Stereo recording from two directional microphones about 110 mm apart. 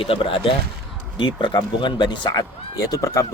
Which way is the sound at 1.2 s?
45° left (ahead or behind).